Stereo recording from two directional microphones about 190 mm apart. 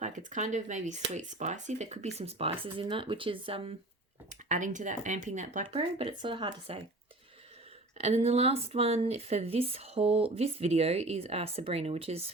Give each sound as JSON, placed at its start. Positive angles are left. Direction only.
{"t": 0.0, "sound": "speech", "side_deg": -40}
{"t": 4.4, "sound": "speech", "side_deg": -40}
{"t": 7.9, "sound": "speech", "side_deg": -35}